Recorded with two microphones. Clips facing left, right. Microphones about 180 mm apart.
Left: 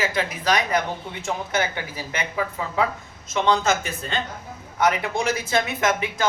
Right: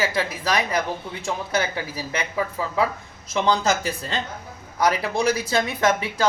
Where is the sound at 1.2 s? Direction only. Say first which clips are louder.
Even; 35° right (ahead or behind).